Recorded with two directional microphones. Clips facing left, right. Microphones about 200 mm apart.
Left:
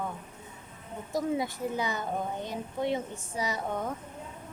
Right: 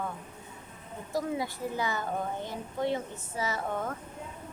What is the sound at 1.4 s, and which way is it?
A woman's voice, 20° left (ahead or behind).